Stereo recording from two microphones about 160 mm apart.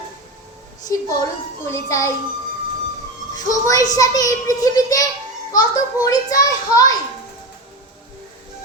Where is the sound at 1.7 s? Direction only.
20° left (ahead or behind).